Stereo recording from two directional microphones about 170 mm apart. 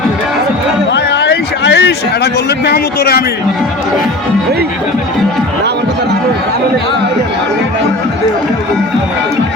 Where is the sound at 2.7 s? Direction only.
65° left (ahead or behind).